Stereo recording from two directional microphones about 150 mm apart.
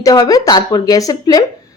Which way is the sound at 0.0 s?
25° left (ahead or behind).